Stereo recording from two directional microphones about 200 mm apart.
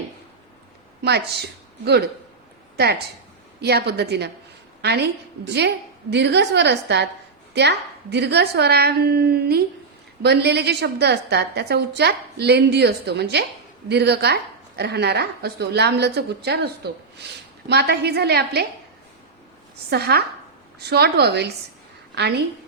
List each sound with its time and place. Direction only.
1.0 s a woman's voice: 55° right (ahead or behind)
19.9 s a woman's voice: 55° right (ahead or behind)